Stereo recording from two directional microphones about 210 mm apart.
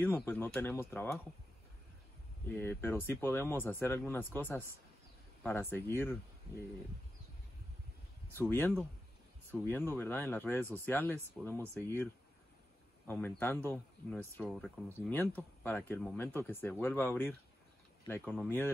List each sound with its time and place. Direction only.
0.0 s speech: 10° left (ahead or behind)
2.5 s speech: 10° left (ahead or behind)
8.4 s a man's voice: 10° left (ahead or behind)